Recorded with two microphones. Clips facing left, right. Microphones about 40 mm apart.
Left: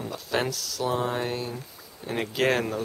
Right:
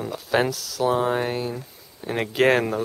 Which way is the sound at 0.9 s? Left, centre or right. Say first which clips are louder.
Right 4 dB; centre.